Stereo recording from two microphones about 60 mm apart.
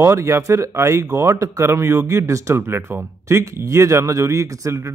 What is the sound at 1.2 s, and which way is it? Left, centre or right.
Speech, right.